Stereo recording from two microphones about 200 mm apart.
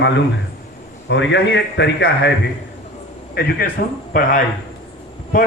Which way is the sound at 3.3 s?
50° left (ahead or behind).